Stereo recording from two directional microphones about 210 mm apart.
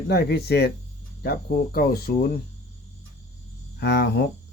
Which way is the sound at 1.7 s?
45° left (ahead or behind).